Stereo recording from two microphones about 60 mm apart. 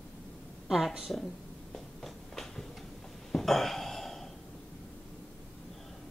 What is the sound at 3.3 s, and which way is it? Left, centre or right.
Burping, centre.